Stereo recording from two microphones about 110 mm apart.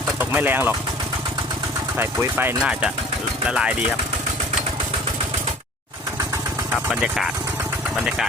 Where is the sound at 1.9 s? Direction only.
20° right (ahead or behind).